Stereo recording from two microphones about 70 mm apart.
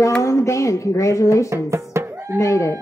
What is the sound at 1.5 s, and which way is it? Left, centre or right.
Music, right.